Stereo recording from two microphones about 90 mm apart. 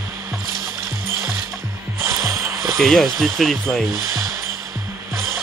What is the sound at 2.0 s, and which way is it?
Music, 35° right (ahead or behind).